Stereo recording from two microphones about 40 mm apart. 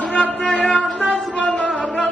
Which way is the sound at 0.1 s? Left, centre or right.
Left.